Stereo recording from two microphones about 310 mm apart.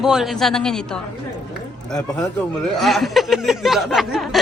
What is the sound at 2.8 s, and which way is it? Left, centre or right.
Speech, centre.